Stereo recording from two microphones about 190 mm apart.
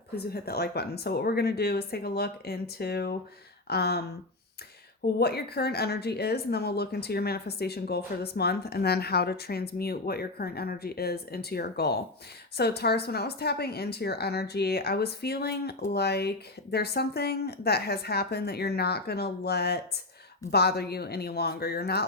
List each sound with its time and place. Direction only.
0.2 s a woman's voice: 55° left (ahead or behind)
5.2 s a woman's voice: 55° left (ahead or behind)